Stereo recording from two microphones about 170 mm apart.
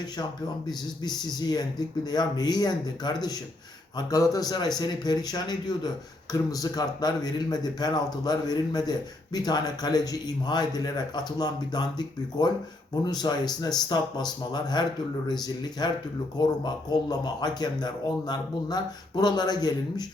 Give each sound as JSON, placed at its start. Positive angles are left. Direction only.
{"t": 0.7, "sound": "speech", "side_deg": 25}